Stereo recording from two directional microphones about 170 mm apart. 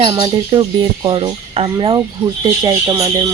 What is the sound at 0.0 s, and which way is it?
Speech, 30° right (ahead or behind).